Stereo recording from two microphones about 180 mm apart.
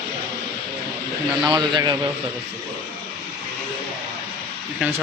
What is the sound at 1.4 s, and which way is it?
Speech, 25° right (ahead or behind).